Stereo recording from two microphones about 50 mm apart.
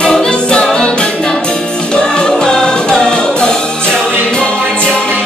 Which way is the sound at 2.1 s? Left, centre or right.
Centre.